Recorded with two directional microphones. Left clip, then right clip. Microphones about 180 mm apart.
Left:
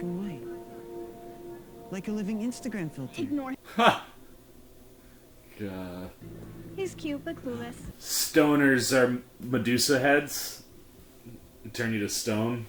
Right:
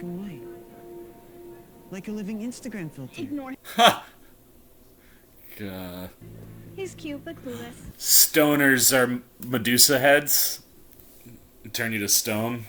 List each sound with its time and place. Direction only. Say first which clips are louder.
0.0 s music: left 1 dB; centre (ahead or behind)
1.9 s speech: left 1 dB; centre (ahead or behind)
3.7 s speech: right 5 dB; 25° right (ahead or behind)
5.5 s speech: right 1 dB; 30° right (ahead or behind)
6.7 s speech: left 1 dB; centre (ahead or behind)
7.9 s speech: right 4 dB; 25° right (ahead or behind)
11.7 s speech: right 6 dB; 25° right (ahead or behind)